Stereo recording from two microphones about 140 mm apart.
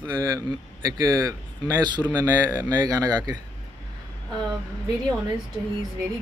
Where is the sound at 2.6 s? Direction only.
25° right (ahead or behind).